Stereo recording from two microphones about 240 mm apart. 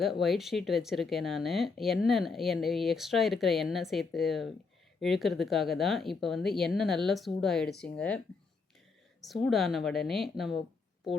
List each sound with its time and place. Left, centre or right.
0.0 s speech: centre
9.2 s speech: centre